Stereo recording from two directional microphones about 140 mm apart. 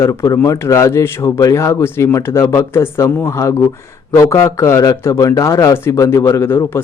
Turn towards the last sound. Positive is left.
turn(degrees=15)  # may be behind; listen again after turning